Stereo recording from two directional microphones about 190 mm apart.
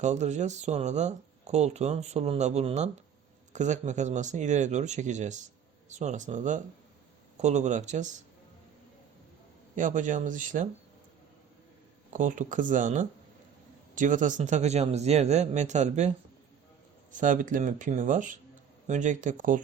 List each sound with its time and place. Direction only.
0.0 s speech: 35° right (ahead or behind)
9.7 s speech: 40° right (ahead or behind)
12.1 s speech: 40° right (ahead or behind)